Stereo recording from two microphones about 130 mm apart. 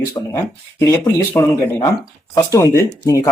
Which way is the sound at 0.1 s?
20° left (ahead or behind).